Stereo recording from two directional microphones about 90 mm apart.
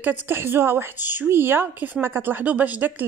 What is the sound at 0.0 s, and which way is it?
A woman's voice, 25° right (ahead or behind).